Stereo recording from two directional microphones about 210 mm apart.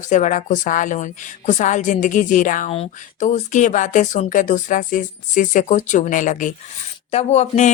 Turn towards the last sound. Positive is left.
turn(degrees=30)  # may be behind; listen again after turning